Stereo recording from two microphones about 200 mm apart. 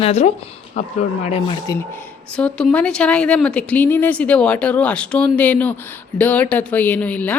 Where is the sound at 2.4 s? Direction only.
5° left (ahead or behind).